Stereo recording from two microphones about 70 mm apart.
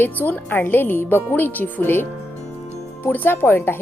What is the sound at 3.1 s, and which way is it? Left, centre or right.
Speech, left.